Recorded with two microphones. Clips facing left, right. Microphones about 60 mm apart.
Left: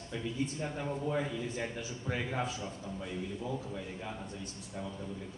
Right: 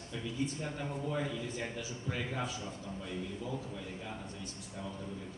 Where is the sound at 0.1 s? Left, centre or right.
Left.